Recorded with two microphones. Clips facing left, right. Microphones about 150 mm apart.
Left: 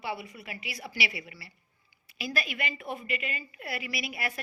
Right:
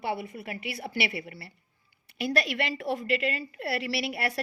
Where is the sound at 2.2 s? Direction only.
70° right (ahead or behind).